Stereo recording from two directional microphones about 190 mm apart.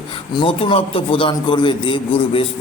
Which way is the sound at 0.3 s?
30° left (ahead or behind).